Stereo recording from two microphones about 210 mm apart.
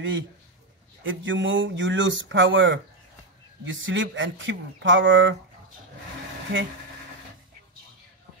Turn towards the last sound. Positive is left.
turn(degrees=-65)  # may be behind; listen again after turning